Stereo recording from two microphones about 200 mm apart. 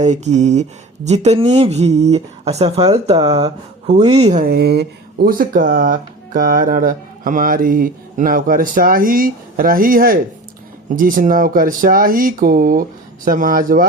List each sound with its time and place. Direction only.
0.0 s speech: 35° right (ahead or behind)
4.1 s speech: 35° right (ahead or behind)
4.4 s speech: 55° right (ahead or behind)